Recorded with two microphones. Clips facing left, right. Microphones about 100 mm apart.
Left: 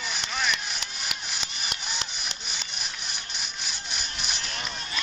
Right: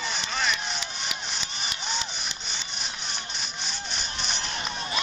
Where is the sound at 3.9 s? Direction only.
5° left (ahead or behind).